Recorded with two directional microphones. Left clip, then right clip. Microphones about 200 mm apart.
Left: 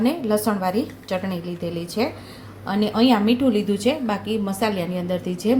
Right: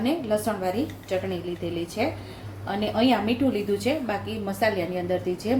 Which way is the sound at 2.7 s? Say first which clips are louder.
Left 4 dB; 45° left (ahead or behind).